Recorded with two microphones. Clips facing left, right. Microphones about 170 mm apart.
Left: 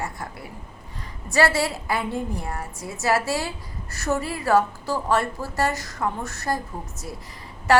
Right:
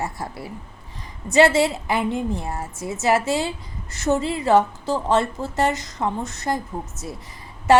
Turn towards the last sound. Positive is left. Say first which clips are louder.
# right 3 dB
turn(degrees=-20)  # may be behind; listen again after turning